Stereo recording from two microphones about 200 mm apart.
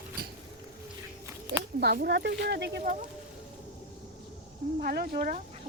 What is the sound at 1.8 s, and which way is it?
A child's voice, 55° right (ahead or behind).